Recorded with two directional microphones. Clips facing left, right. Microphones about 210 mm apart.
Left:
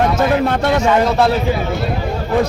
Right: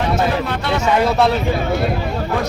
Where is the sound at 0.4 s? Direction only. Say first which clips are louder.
Left 7 dB; 50° left (ahead or behind).